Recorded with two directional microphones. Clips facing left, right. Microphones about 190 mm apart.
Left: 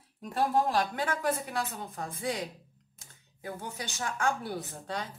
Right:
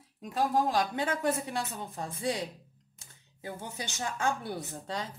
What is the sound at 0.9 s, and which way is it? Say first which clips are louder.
A woman's voice: right 1 dB; 25° right (ahead or behind).